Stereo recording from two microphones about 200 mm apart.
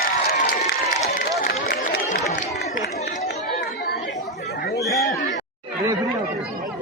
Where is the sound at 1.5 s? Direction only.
50° left (ahead or behind).